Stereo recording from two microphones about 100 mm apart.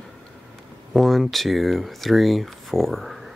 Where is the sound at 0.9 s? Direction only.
Centre (ahead or behind).